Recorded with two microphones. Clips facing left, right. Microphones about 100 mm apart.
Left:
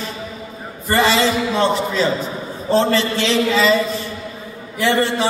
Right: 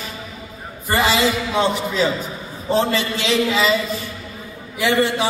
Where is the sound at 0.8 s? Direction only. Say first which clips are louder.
Left 2 dB; 15° right (ahead or behind).